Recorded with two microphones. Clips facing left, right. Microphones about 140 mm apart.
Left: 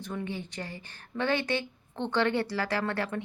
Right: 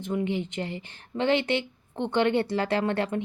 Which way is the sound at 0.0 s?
20° right (ahead or behind).